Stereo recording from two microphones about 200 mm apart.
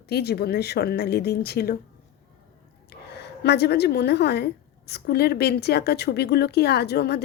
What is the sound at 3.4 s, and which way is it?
Speech, 55° left (ahead or behind).